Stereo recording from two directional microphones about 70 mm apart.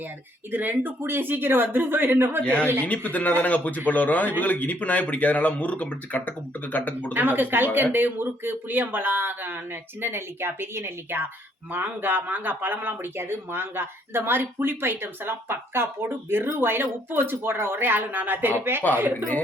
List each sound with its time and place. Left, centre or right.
0.5 s speech: right
2.4 s speech: centre
7.1 s speech: right